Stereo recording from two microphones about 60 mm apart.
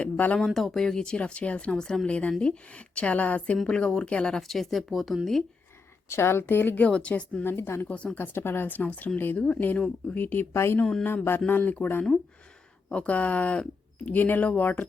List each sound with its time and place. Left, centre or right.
0.0 s speech: left
0.3 s a woman's voice: centre
4.4 s speech: centre
6.1 s mantra: left
6.8 s speech: left
7.4 s mantra: left
7.9 s speech: left
8.2 s mantra: left
9.4 s speech: left
10.2 s mantra: left
10.5 s speech: left
11.0 s mantra: left
12.9 s speech: left